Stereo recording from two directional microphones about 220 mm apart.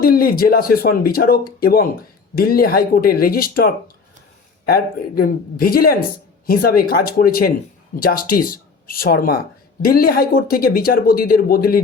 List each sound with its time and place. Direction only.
0.0 s speech: 40° left (ahead or behind)
4.7 s speech: 40° left (ahead or behind)